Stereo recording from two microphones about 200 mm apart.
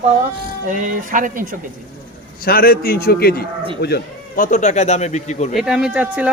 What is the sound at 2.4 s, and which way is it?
A man's voice, 45° left (ahead or behind).